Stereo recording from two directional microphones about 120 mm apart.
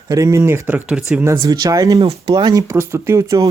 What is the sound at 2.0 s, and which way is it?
Speech, 55° right (ahead or behind).